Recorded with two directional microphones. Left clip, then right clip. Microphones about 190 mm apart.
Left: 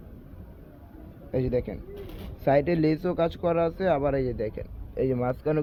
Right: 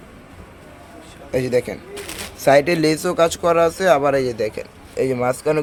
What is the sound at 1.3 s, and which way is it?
A man's voice, 15° right (ahead or behind).